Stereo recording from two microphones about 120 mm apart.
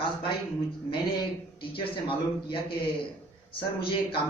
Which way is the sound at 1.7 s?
45° left (ahead or behind).